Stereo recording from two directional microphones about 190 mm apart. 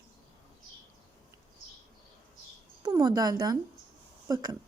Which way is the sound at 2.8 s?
20° right (ahead or behind).